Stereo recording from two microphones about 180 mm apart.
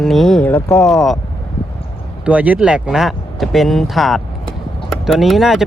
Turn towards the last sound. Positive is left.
turn(degrees=0)  # may be behind; listen again after turning